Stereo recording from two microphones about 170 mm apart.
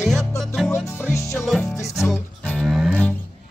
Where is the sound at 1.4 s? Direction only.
Centre (ahead or behind).